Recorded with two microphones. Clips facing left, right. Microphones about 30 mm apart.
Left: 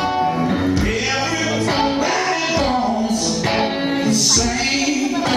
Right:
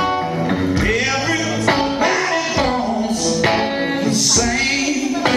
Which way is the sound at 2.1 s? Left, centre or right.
Centre.